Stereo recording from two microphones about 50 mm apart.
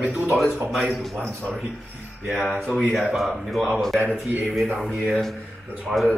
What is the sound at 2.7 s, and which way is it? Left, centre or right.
Speech, centre.